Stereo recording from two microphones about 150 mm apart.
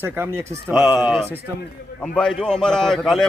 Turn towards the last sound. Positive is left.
turn(degrees=0)  # may be behind; listen again after turning